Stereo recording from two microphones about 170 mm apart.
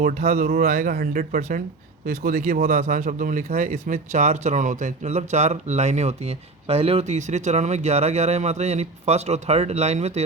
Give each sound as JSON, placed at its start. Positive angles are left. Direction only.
{"t": 0.0, "sound": "speech", "side_deg": -45}